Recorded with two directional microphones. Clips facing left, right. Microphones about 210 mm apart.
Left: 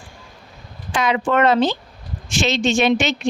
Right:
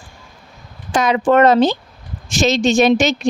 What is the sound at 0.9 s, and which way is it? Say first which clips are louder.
Speech: right 5 dB; 40° right (ahead or behind).